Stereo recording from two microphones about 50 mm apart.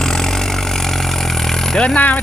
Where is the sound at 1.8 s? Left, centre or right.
Left.